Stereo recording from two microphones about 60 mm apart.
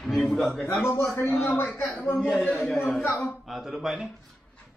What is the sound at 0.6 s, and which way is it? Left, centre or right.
A man's voice, left.